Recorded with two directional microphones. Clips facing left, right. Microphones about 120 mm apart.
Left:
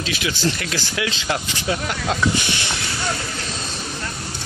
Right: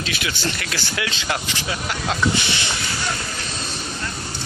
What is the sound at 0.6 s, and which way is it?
Speech, 25° left (ahead or behind).